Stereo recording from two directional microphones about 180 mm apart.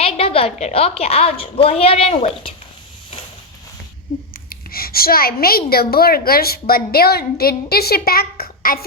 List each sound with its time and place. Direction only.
0.0 s a woman's voice: 30° left (ahead or behind)
4.4 s a woman's voice: 55° left (ahead or behind)